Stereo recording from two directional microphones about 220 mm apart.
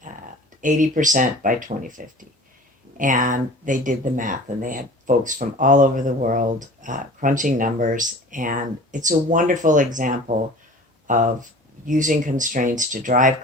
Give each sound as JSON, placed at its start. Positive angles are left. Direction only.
{"t": 0.6, "sound": "speech", "side_deg": -35}